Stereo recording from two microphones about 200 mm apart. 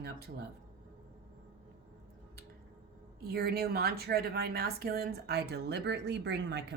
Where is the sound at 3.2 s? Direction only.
50° right (ahead or behind).